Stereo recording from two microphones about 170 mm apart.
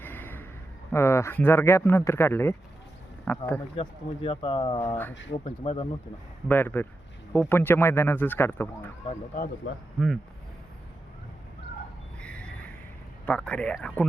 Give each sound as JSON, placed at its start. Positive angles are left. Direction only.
{"t": 0.0, "sound": "a sound", "side_deg": 10}
{"t": 0.9, "sound": "speech", "side_deg": 15}
{"t": 3.8, "sound": "speech", "side_deg": 35}
{"t": 6.5, "sound": "speech", "side_deg": 10}
{"t": 9.6, "sound": "speech", "side_deg": 90}
{"t": 12.2, "sound": "a sound", "side_deg": 5}
{"t": 13.2, "sound": "speech", "side_deg": 10}